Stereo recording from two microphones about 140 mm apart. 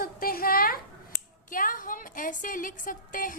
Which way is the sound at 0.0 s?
90° left.